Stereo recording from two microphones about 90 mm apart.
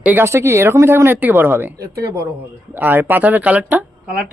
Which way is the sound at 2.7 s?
20° right (ahead or behind).